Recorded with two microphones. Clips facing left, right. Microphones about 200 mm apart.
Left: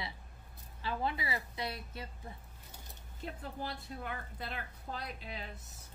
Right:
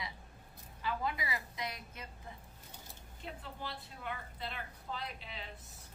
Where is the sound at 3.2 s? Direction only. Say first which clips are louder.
Left 4 dB; 40° left (ahead or behind).